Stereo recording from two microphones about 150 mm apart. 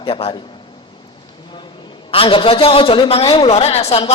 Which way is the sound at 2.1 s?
40° left (ahead or behind).